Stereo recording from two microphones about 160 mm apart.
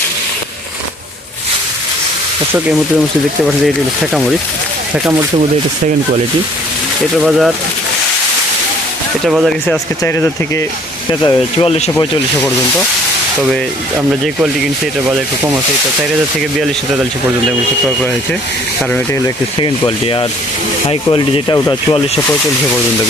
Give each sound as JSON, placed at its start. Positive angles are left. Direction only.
{"t": 2.5, "sound": "speech", "side_deg": -10}
{"t": 4.0, "sound": "speech", "side_deg": 0}
{"t": 7.2, "sound": "speech", "side_deg": 0}
{"t": 9.2, "sound": "speech", "side_deg": 0}
{"t": 10.0, "sound": "speech", "side_deg": 15}
{"t": 14.4, "sound": "speech", "side_deg": -5}
{"t": 20.9, "sound": "speech", "side_deg": 35}